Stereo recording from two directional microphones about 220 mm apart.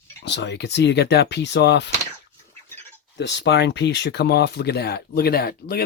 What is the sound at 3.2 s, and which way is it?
Speech, 50° left (ahead or behind).